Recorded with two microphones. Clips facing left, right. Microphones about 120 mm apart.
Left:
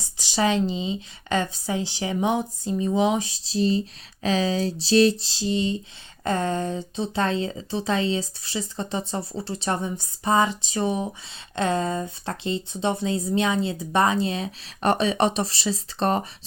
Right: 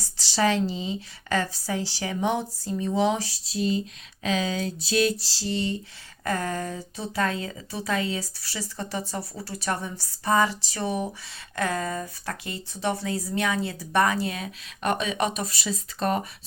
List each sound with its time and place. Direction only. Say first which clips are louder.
0.0 s speech: left 1 dB; 15° left (ahead or behind)